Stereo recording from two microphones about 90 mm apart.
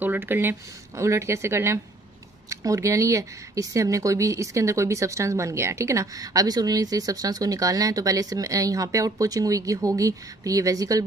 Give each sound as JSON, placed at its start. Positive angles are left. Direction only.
{"t": 0.0, "sound": "speech", "side_deg": -20}